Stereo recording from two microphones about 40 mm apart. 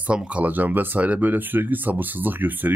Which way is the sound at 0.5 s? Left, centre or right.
Right.